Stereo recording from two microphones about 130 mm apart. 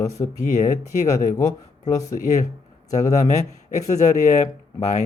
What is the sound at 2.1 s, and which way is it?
Speech, 85° left.